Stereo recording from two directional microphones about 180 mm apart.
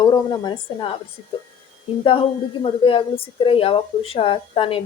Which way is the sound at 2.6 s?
30° left (ahead or behind).